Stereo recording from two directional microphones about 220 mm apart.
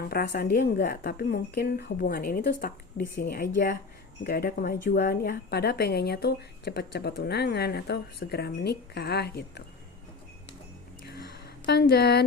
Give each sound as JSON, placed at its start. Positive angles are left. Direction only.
{"t": 0.1, "sound": "speech", "side_deg": 45}
{"t": 11.6, "sound": "speech", "side_deg": 45}